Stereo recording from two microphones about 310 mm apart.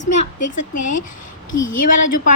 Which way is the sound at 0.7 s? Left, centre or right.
Left.